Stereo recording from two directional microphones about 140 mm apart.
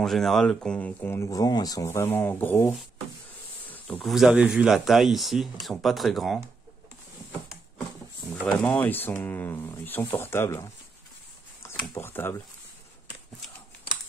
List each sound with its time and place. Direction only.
0.0 s speech: centre (ahead or behind)
3.6 s insect: 10° left (ahead or behind)
4.0 s speech: centre (ahead or behind)
8.5 s speech: 10° left (ahead or behind)
11.9 s speech: 15° left (ahead or behind)